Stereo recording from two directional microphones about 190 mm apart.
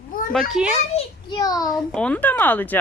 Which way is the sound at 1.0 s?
20° left (ahead or behind).